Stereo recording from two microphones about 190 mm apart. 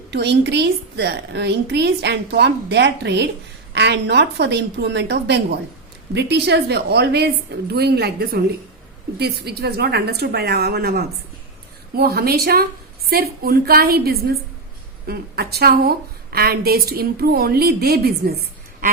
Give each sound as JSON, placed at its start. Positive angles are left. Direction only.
{"t": 0.1, "sound": "a woman's voice", "side_deg": -65}